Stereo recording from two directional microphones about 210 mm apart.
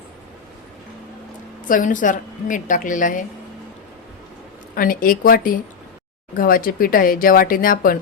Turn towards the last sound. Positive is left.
turn(degrees=40)  # may be behind; listen again after turning